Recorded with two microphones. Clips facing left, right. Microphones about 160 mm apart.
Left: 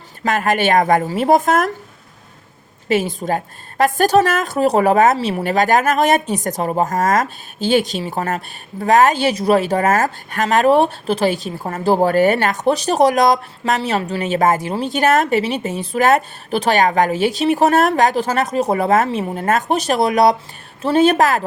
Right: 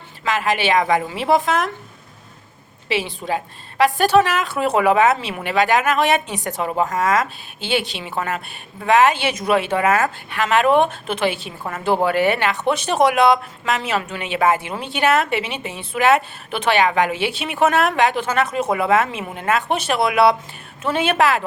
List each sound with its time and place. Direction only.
0.2 s speech: 50° left (ahead or behind)
2.9 s a woman's voice: 45° left (ahead or behind)